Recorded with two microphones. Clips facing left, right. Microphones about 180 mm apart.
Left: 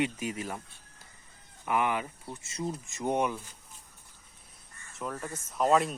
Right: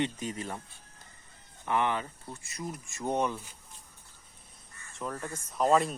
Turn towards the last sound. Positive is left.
turn(degrees=0)  # may be behind; listen again after turning